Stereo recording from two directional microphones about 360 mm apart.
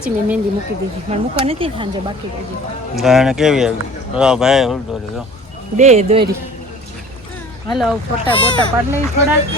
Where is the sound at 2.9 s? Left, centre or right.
Centre.